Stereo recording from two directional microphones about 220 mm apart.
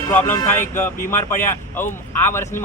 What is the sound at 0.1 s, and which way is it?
Speech, 10° left (ahead or behind).